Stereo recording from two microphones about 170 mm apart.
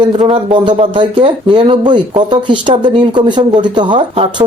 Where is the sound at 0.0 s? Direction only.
30° right (ahead or behind).